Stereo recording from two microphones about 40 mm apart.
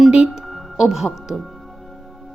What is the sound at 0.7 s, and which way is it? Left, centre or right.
Speech, centre.